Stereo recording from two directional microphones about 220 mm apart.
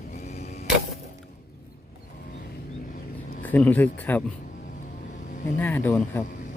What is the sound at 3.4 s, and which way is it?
Speech, 5° left (ahead or behind).